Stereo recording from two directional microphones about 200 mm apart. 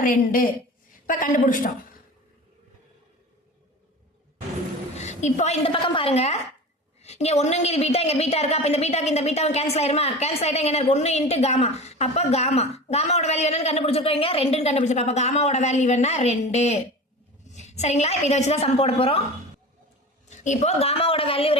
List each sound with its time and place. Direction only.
0.0 s a woman's voice: 45° left (ahead or behind)
4.9 s a woman's voice: 35° left (ahead or behind)
20.4 s a woman's voice: 35° left (ahead or behind)